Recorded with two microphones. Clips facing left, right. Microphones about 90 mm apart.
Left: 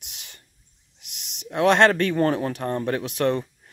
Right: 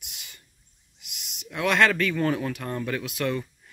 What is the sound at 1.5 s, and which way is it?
Speech, 40° left (ahead or behind).